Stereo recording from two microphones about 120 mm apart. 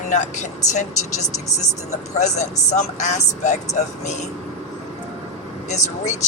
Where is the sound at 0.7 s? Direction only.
80° left.